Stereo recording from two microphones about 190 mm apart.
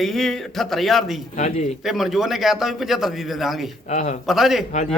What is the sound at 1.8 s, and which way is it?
A man's voice, centre (ahead or behind).